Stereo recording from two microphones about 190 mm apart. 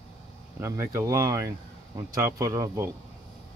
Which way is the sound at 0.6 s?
15° right (ahead or behind).